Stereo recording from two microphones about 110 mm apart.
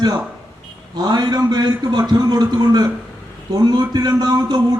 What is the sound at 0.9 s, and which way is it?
A man's voice, 40° right (ahead or behind).